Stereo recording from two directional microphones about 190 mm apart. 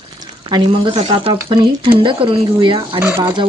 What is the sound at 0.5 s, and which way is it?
Speech, 25° right (ahead or behind).